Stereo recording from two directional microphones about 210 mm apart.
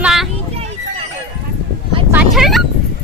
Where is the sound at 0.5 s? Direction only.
30° right (ahead or behind).